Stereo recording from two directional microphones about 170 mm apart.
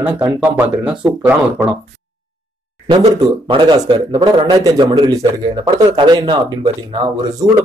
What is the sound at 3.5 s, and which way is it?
Speech, 25° right (ahead or behind).